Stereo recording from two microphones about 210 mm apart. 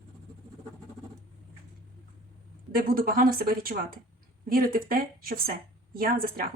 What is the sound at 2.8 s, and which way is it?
Speech, 40° right (ahead or behind).